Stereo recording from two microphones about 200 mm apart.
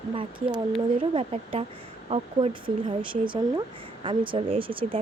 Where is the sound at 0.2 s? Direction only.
25° right (ahead or behind).